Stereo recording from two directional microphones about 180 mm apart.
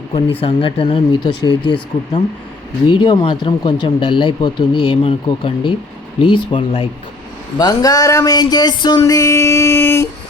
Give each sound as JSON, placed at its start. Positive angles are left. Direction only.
{"t": 0.1, "sound": "speech", "side_deg": 30}